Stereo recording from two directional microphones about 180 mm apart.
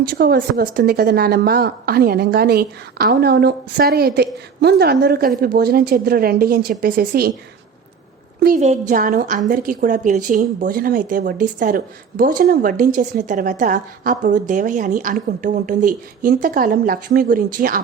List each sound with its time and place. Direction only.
0.1 s a woman's voice: 55° right (ahead or behind)
8.4 s a woman's voice: 50° right (ahead or behind)
8.6 s speech: 40° right (ahead or behind)